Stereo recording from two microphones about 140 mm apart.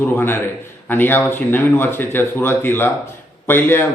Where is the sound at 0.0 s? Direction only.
15° left (ahead or behind).